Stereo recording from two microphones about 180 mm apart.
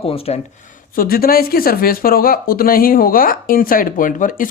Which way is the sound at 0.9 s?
55° left (ahead or behind).